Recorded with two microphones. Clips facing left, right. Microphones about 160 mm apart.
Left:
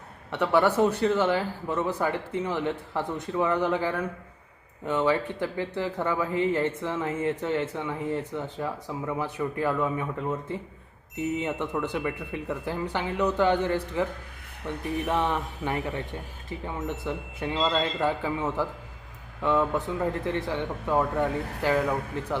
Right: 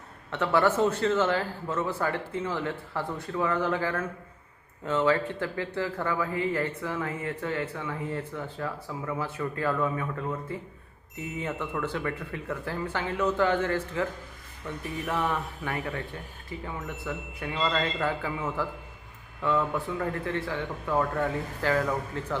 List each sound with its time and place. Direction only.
0.3 s a man's voice: 15° left (ahead or behind)
11.3 s a man's voice: 20° left (ahead or behind)
17.1 s a man's voice: 25° left (ahead or behind)